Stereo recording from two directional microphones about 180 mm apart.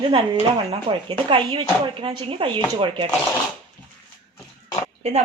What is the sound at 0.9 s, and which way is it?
Speech, 25° right (ahead or behind).